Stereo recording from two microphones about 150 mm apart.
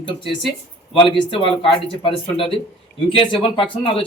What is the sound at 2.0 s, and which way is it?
Speech, 35° left (ahead or behind).